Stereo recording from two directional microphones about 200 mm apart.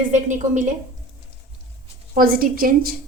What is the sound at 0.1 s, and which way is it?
Speech, 35° right (ahead or behind).